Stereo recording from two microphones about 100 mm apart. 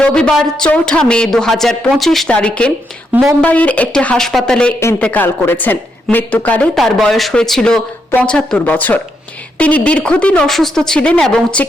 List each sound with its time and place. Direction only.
0.0 s speech: 10° left (ahead or behind)
3.1 s speech: 10° right (ahead or behind)
3.4 s speech: 15° left (ahead or behind)
6.7 s speech: centre (ahead or behind)